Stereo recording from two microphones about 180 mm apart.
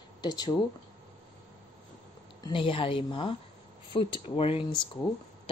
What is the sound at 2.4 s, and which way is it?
Speech, 30° left (ahead or behind).